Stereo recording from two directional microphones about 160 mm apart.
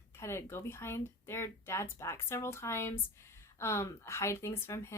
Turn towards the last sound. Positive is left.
turn(degrees=15)  # may be behind; listen again after turning